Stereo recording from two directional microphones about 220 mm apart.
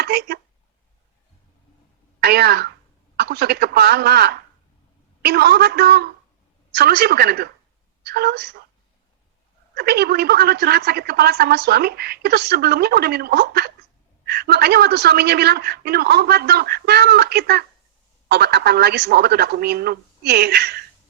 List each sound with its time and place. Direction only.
0.0 s a sound: 45° right (ahead or behind)
2.2 s a woman's voice: 45° right (ahead or behind)
9.7 s a woman's voice: 45° right (ahead or behind)